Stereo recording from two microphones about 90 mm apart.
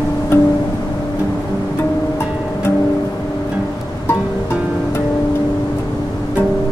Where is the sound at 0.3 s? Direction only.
25° left (ahead or behind).